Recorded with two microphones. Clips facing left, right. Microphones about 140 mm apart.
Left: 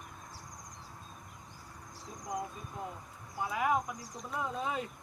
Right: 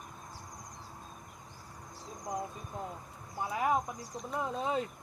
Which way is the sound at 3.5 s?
30° right (ahead or behind).